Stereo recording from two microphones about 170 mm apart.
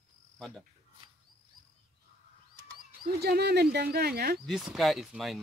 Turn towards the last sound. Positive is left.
turn(degrees=0)  # may be behind; listen again after turning